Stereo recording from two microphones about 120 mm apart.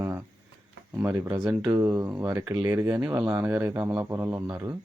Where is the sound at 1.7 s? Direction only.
20° right (ahead or behind).